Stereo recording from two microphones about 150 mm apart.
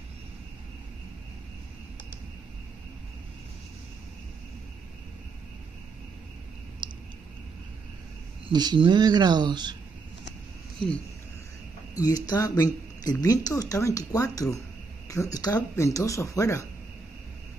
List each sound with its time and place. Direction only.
6.8 s a sound: 30° right (ahead or behind)
8.5 s speech: 30° right (ahead or behind)
11.9 s speech: 25° left (ahead or behind)